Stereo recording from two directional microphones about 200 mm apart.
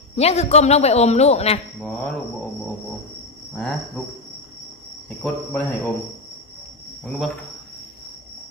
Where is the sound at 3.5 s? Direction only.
Centre (ahead or behind).